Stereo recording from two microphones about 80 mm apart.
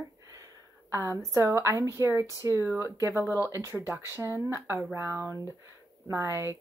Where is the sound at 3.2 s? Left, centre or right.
Left.